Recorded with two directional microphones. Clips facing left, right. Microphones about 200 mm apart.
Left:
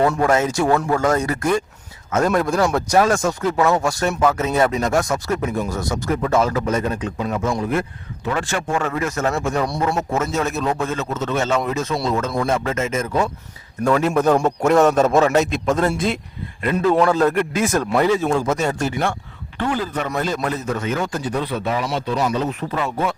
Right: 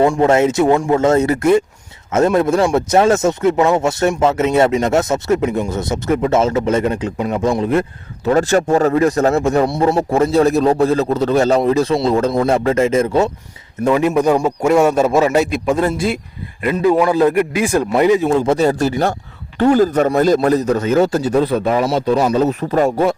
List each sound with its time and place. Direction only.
0.2 s speech: 25° right (ahead or behind)
8.3 s a man's voice: 40° right (ahead or behind)
13.8 s a man's voice: 15° right (ahead or behind); by 23.1 s 40° right (ahead or behind)